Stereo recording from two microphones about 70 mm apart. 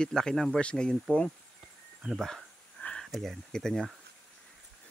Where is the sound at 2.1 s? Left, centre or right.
Centre.